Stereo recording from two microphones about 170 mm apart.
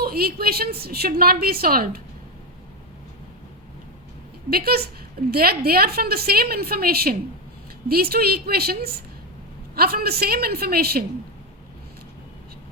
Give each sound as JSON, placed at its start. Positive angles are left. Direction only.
{"t": 0.0, "sound": "a woman's voice", "side_deg": -65}
{"t": 4.4, "sound": "a woman's voice", "side_deg": -65}